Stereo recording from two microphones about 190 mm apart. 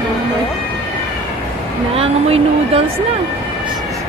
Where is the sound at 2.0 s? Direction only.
30° right (ahead or behind).